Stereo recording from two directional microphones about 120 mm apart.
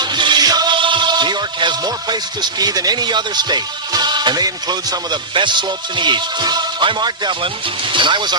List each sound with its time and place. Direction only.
0.0 s speech: 40° right (ahead or behind)